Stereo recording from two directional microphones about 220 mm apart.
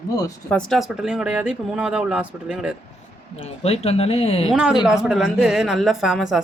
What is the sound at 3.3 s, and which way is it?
Speech, 25° left (ahead or behind).